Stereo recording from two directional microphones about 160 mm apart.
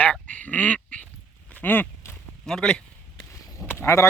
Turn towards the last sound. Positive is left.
turn(degrees=15)  # may be behind; listen again after turning